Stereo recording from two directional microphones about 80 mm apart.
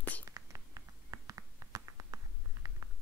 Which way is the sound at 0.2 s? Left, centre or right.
Right.